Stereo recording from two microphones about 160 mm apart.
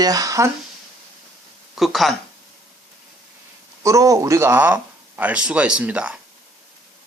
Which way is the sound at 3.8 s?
20° right (ahead or behind).